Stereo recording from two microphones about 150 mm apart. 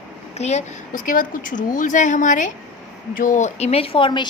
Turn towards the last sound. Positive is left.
turn(degrees=35)  # may be behind; listen again after turning